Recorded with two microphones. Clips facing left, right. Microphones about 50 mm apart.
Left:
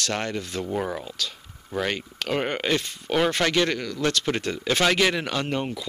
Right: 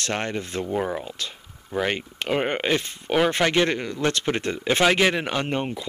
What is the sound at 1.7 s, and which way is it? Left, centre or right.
Speech, centre.